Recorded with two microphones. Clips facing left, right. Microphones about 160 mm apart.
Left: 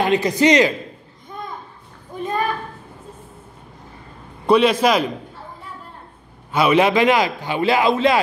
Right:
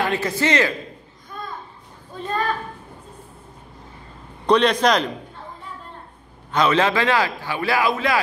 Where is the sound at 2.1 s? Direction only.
10° left (ahead or behind).